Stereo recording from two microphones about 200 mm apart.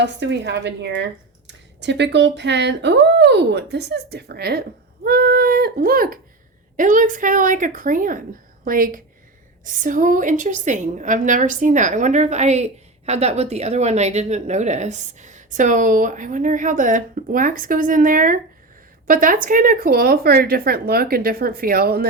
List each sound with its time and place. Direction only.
0.0 s speech: 60° right (ahead or behind)
5.0 s a sound: 50° right (ahead or behind)
6.7 s a woman's voice: 40° right (ahead or behind)